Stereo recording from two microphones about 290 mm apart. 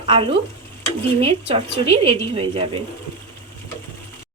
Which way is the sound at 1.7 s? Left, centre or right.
Right.